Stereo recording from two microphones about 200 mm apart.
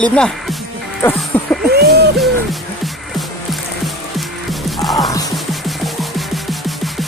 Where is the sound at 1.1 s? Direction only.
5° left (ahead or behind).